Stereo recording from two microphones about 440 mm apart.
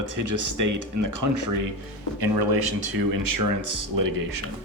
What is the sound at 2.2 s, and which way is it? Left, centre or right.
Speech, right.